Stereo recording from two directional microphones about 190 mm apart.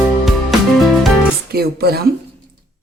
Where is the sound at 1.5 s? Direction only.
55° right (ahead or behind).